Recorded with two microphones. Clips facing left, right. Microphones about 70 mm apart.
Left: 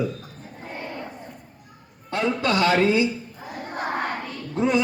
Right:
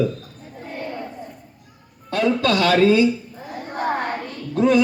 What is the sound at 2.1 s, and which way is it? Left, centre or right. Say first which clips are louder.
A man's voice: right 4 dB; left.